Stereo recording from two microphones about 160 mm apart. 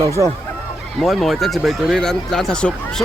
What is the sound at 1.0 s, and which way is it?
Speech, centre (ahead or behind).